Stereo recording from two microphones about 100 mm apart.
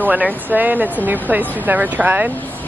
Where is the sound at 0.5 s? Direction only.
15° right (ahead or behind).